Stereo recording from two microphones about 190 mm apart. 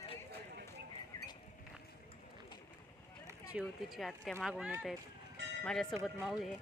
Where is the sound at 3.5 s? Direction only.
5° right (ahead or behind).